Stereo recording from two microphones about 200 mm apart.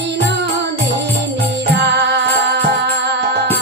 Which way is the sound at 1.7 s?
60° right (ahead or behind).